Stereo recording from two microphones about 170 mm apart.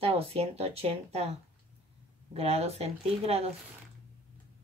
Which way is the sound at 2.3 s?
35° right (ahead or behind).